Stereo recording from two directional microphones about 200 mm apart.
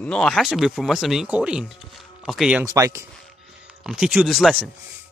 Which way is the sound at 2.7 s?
15° right (ahead or behind).